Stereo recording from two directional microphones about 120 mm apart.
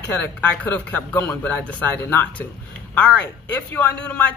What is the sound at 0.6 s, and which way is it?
Speech, 15° left (ahead or behind).